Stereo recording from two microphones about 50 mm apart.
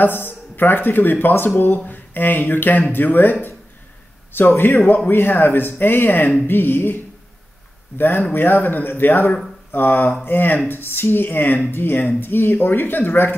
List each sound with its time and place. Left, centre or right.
0.0 s a man's voice: left
1.3 s a man's voice: left
8.0 s a man's voice: left